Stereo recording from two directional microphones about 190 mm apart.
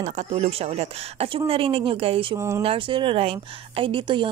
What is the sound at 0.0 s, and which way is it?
A woman's voice, 40° right (ahead or behind).